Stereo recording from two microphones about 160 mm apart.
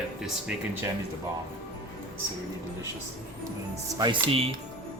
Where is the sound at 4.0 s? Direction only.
30° right (ahead or behind).